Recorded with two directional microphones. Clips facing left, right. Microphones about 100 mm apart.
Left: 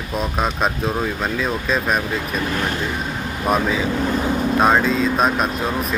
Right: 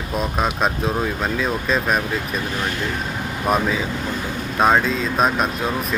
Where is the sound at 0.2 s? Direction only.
Centre (ahead or behind).